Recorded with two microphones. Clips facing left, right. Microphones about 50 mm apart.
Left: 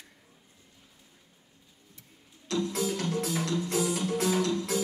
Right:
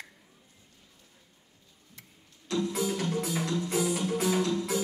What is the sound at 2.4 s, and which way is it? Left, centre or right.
Music, centre.